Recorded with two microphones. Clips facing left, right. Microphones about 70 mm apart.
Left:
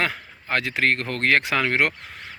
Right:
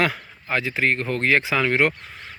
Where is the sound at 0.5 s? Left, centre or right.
Left.